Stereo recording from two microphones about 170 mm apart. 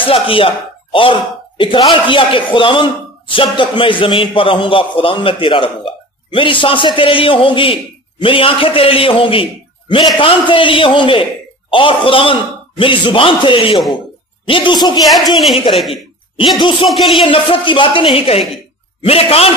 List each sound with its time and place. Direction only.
0.0 s a man's voice: 30° left (ahead or behind)
1.6 s a man's voice: 30° left (ahead or behind)
15.3 s speech: centre (ahead or behind)
16.3 s speech: 30° left (ahead or behind)
16.9 s speech: centre (ahead or behind)
17.2 s a man's voice: 30° left (ahead or behind)